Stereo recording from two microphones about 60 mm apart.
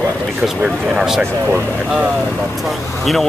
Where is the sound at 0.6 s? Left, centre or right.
Centre.